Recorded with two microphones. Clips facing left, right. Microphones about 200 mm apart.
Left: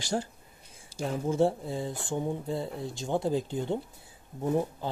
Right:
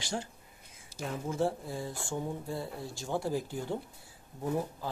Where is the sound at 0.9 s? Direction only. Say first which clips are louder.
Left 6 dB; 25° left (ahead or behind).